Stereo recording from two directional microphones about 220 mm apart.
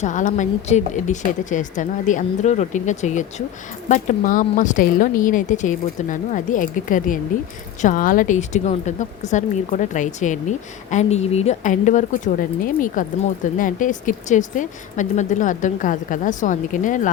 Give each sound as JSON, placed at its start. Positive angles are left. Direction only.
{"t": 0.0, "sound": "speech", "side_deg": 35}